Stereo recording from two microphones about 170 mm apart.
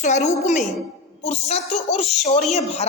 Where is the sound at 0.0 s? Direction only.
45° left (ahead or behind).